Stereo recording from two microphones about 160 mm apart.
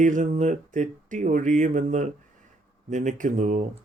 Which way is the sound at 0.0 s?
50° right (ahead or behind).